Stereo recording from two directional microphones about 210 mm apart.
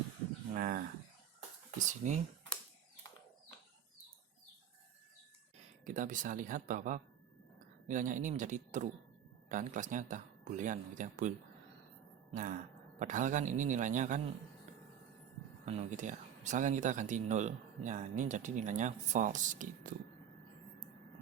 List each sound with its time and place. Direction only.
0.5 s a sound: 40° right (ahead or behind)
1.8 s speech: 35° right (ahead or behind)
5.8 s speech: 35° right (ahead or behind)
15.6 s speech: 30° right (ahead or behind)